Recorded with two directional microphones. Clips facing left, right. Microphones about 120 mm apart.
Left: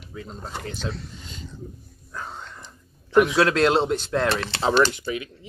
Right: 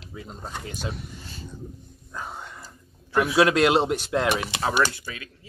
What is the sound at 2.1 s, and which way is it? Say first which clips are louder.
Whispering: even; 10° right (ahead or behind).